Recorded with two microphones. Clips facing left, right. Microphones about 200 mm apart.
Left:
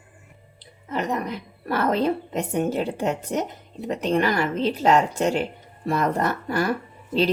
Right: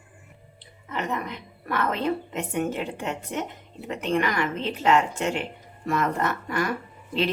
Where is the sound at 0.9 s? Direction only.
40° left (ahead or behind).